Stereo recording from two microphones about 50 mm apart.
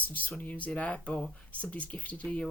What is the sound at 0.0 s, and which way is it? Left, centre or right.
Speech, left.